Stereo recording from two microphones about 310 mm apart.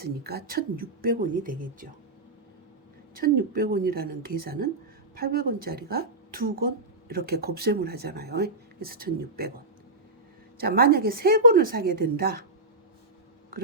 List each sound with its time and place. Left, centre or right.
0.0 s speech: right
3.2 s speech: right
10.6 s speech: right